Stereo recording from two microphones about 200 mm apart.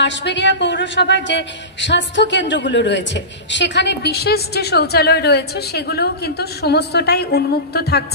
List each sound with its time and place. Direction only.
0.0 s a woman's voice: 60° left (ahead or behind)